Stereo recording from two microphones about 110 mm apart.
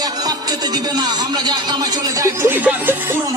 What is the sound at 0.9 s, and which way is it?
Speech, 40° right (ahead or behind).